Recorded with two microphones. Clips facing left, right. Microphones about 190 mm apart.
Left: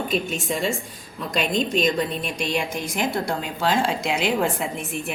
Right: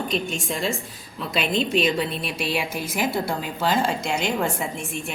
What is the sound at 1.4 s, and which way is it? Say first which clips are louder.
Speech: even; 40° left (ahead or behind).